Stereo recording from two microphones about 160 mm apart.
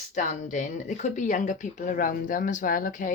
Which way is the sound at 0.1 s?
50° left (ahead or behind).